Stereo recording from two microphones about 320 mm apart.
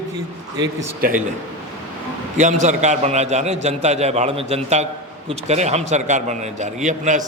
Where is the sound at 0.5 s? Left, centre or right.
Centre.